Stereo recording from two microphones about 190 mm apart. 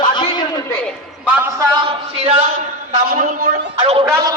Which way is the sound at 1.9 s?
30° right (ahead or behind).